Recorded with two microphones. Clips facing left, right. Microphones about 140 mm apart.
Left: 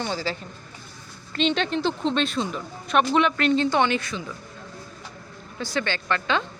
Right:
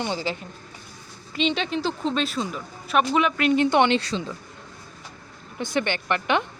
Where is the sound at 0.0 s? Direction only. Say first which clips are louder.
Right 1 dB; 20° right (ahead or behind).